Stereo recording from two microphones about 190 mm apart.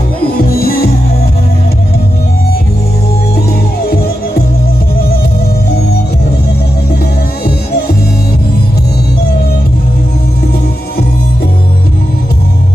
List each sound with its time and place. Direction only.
0.2 s music: 50° left (ahead or behind)
3.5 s music: 55° left (ahead or behind)